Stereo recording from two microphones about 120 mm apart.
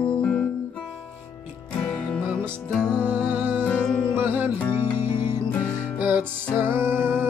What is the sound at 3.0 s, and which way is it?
Music, 15° right (ahead or behind).